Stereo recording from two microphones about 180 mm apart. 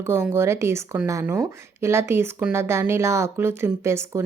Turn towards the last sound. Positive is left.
turn(degrees=-15)  # may be behind; listen again after turning